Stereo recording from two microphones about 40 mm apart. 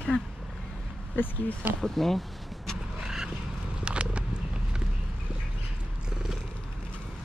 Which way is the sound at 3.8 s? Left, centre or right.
Right.